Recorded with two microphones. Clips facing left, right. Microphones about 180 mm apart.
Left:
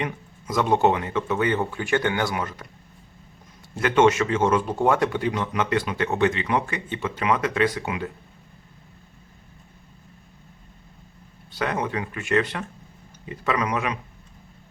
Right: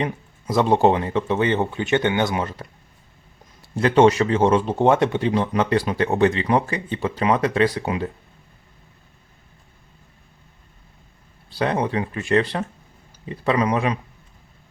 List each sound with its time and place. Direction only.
0.0 s speech: 30° right (ahead or behind)
3.8 s speech: 35° right (ahead or behind)
11.5 s speech: 30° right (ahead or behind)